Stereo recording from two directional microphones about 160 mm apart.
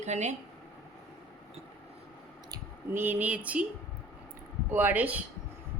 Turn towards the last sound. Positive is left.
turn(degrees=-10)  # may be behind; listen again after turning